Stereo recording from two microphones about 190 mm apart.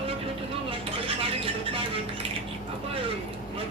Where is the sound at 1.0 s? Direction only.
30° right (ahead or behind).